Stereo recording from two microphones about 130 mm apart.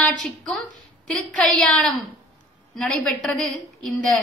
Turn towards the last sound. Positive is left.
turn(degrees=5)  # may be behind; listen again after turning